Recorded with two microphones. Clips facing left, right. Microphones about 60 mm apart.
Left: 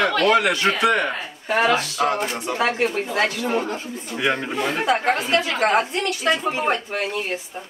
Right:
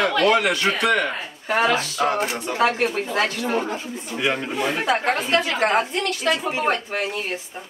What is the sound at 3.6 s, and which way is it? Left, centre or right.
Speech, centre.